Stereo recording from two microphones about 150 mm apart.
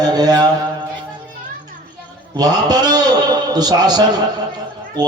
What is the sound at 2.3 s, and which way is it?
A man's voice, 25° right (ahead or behind).